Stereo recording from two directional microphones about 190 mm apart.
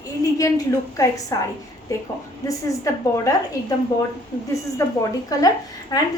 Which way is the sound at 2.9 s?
15° left (ahead or behind).